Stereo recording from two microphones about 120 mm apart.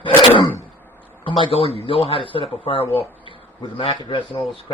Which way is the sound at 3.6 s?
40° left (ahead or behind).